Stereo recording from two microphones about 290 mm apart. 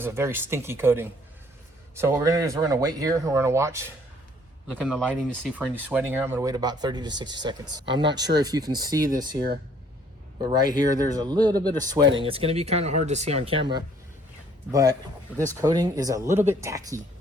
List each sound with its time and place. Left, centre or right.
0.0 s speech: centre
4.7 s speech: centre